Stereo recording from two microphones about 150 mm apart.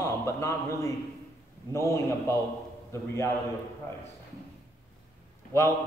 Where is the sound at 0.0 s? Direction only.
20° left (ahead or behind).